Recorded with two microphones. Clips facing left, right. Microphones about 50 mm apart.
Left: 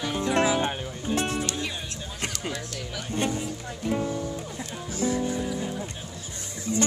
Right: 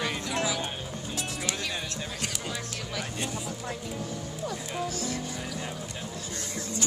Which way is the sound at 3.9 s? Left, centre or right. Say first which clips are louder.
Left 8 dB; left.